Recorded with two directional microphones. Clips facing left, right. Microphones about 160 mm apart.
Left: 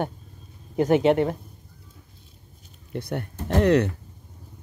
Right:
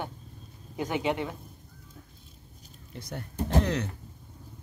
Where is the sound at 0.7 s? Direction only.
50° left (ahead or behind).